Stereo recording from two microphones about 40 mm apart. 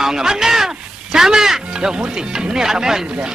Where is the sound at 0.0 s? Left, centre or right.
Centre.